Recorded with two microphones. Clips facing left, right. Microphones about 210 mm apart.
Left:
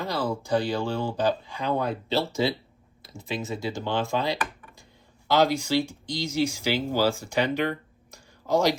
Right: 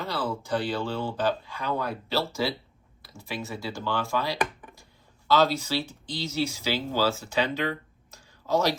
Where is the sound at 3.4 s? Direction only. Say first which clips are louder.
Left 2 dB; 15° left (ahead or behind).